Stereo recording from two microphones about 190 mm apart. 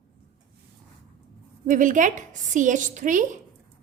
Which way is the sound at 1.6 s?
40° right (ahead or behind).